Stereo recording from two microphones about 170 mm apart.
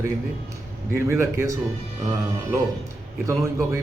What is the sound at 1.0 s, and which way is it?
Speech, 15° right (ahead or behind).